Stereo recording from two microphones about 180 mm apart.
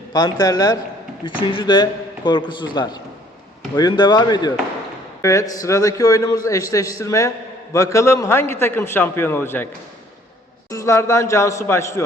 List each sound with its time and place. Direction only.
0.1 s a man's voice: 20° left (ahead or behind)
10.7 s a man's voice: 15° left (ahead or behind)